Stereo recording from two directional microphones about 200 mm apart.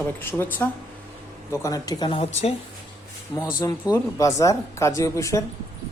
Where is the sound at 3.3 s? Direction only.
20° left (ahead or behind).